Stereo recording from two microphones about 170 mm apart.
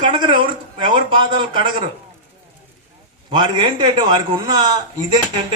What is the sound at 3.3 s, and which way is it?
Speech, 25° right (ahead or behind).